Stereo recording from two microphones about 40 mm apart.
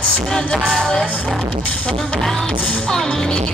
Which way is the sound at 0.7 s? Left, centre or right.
Centre.